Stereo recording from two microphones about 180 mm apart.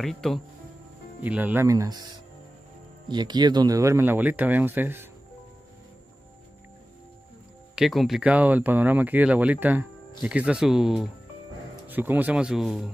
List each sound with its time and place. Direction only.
0.0 s speech: centre (ahead or behind)
1.2 s speech: 10° right (ahead or behind)
7.7 s speech: centre (ahead or behind)